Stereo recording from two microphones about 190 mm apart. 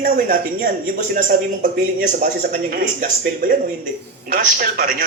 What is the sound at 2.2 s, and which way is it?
A man's voice, 45° right (ahead or behind).